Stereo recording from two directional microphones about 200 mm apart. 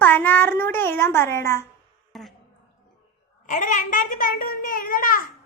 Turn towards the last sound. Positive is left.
turn(degrees=45)  # may be behind; listen again after turning